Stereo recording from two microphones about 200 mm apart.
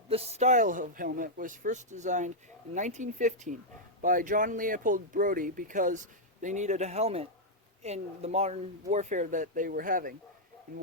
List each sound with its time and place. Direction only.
0.1 s speech: 30° right (ahead or behind)